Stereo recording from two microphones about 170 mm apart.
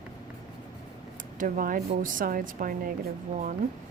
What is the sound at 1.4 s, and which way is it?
Speech, 55° right (ahead or behind).